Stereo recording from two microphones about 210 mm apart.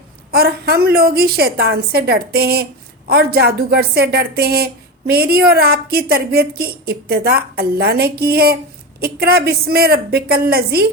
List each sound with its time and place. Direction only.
0.3 s speech: 45° right (ahead or behind)